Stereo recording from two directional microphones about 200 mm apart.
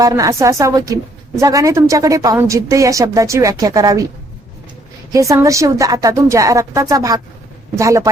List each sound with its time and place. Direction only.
0.0 s a woman's voice: 15° right (ahead or behind)
5.1 s a woman's voice: 15° right (ahead or behind)